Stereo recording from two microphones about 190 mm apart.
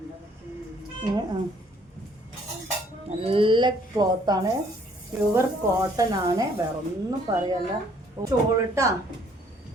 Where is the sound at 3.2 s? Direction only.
30° right (ahead or behind).